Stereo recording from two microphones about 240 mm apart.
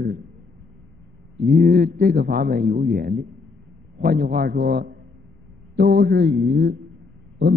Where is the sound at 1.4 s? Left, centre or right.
Right.